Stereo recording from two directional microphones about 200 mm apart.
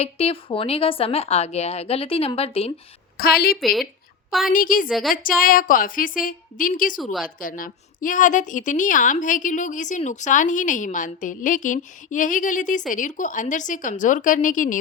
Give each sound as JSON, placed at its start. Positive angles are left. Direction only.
{"t": 0.0, "sound": "a woman's voice", "side_deg": 30}
{"t": 3.2, "sound": "a woman's voice", "side_deg": 50}
{"t": 3.6, "sound": "speech", "side_deg": 0}
{"t": 4.4, "sound": "a woman's voice", "side_deg": 45}
{"t": 4.9, "sound": "speech", "side_deg": 0}
{"t": 5.4, "sound": "a woman's voice", "side_deg": 45}
{"t": 7.0, "sound": "speech", "side_deg": 0}
{"t": 7.3, "sound": "a woman's voice", "side_deg": 45}